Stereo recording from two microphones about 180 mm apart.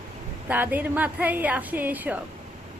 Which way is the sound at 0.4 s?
10° right (ahead or behind).